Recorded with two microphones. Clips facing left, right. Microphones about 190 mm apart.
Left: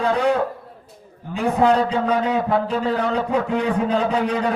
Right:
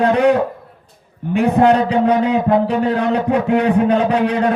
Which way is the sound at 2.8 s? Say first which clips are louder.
Right 5 dB; 65° right (ahead or behind).